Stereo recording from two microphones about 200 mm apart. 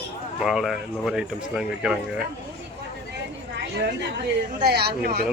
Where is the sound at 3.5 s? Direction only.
60° right (ahead or behind).